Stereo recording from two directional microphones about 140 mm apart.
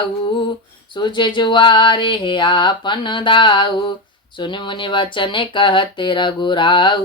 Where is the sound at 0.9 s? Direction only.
35° left (ahead or behind).